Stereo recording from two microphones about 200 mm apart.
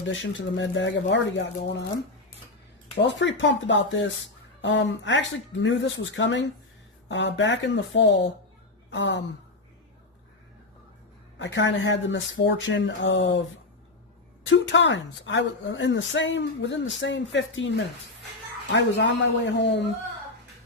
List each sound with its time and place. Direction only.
0.0 s a woman's voice: 70° left (ahead or behind)
3.0 s a woman's voice: 60° left (ahead or behind)
11.3 s speech: 65° left (ahead or behind)
14.4 s a woman's voice: 65° left (ahead or behind)